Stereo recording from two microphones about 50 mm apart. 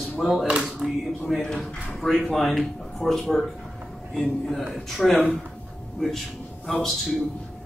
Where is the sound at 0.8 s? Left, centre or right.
Centre.